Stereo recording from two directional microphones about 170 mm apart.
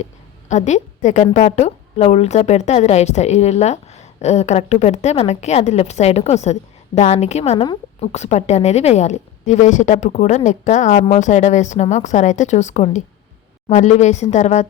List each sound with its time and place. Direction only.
0.0 s a woman's voice: 45° left (ahead or behind)